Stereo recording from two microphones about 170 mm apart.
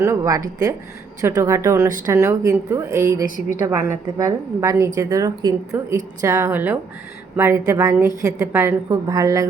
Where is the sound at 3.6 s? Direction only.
20° right (ahead or behind).